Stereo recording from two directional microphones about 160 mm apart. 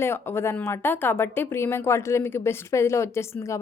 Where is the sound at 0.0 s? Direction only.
15° left (ahead or behind).